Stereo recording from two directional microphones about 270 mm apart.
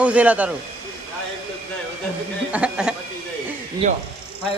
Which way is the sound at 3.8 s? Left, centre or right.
Right.